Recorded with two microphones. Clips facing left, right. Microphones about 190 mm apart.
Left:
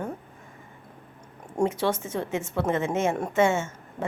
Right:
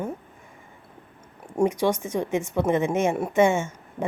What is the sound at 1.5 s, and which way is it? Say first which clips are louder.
A woman's voice: right 3 dB; 15° right (ahead or behind).